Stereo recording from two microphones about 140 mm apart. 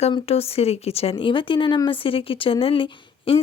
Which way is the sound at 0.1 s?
45° left (ahead or behind).